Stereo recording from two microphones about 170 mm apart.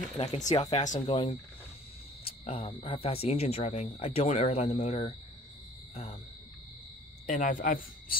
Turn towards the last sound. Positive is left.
turn(degrees=55)  # may be behind; listen again after turning